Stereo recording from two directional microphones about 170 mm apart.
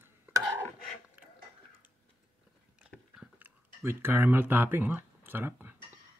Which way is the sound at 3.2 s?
10° right (ahead or behind).